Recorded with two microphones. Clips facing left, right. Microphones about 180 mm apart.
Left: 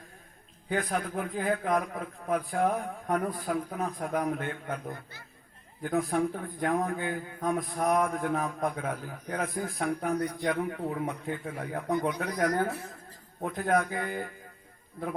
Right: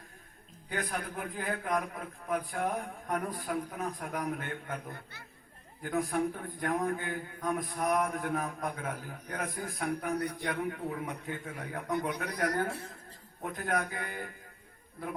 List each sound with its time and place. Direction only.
0.7 s a man's voice: 50° left (ahead or behind)
12.7 s speech: 30° right (ahead or behind)
13.6 s a man's voice: 45° left (ahead or behind)